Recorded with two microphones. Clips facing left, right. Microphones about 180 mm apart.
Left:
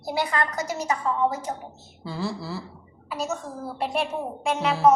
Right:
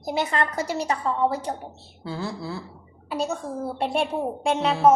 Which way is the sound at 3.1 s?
30° right (ahead or behind).